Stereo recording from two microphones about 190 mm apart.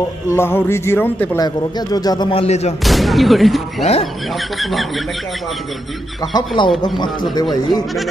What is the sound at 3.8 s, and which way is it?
Speech, 35° left (ahead or behind).